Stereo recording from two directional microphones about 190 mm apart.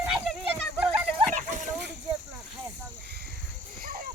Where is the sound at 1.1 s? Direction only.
40° right (ahead or behind).